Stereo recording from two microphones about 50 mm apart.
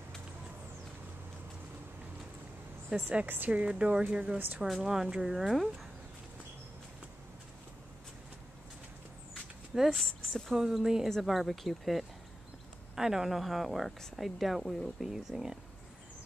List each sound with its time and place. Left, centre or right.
2.9 s speech: centre
3.3 s speech: right
4.6 s speech: centre
9.8 s speech: centre